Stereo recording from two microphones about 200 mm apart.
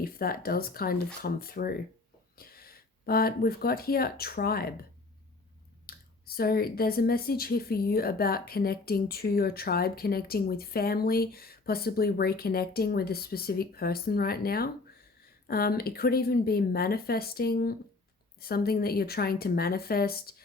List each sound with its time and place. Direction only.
0.0 s speech: 50° left (ahead or behind)
5.8 s speech: 50° left (ahead or behind)